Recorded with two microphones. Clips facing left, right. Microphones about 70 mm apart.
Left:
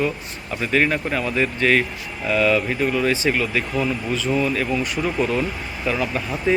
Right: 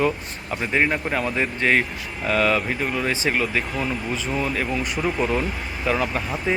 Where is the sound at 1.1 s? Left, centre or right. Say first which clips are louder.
Left 2 dB; right.